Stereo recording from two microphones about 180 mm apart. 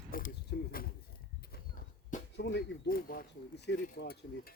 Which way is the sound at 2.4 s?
70° left (ahead or behind).